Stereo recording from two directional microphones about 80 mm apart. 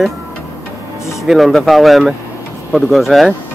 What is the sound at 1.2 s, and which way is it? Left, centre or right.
Speech, centre.